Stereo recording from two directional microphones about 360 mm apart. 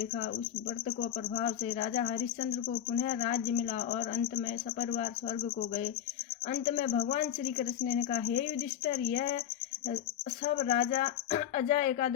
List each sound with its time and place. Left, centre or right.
0.9 s speech: left
10.4 s speech: left